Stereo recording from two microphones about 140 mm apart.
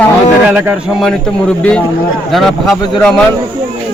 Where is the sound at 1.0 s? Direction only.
5° left (ahead or behind).